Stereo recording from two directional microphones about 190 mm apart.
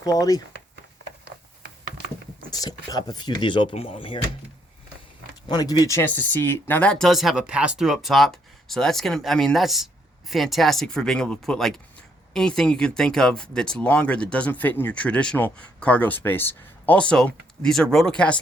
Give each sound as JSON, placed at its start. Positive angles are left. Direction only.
{"t": 0.0, "sound": "speech", "side_deg": 20}
{"t": 2.5, "sound": "speech", "side_deg": 20}
{"t": 5.5, "sound": "speech", "side_deg": 20}